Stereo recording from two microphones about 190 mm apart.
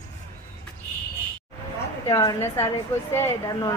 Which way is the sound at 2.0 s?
15° left (ahead or behind).